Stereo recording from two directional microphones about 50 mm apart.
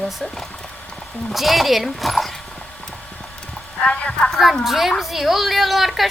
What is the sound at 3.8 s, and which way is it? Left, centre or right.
Speech, centre.